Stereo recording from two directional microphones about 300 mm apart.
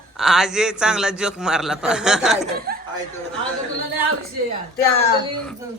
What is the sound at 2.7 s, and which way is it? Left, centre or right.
Chuckle, right.